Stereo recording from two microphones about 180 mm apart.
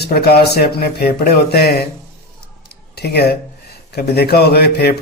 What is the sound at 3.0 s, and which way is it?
Speech, 65° left (ahead or behind).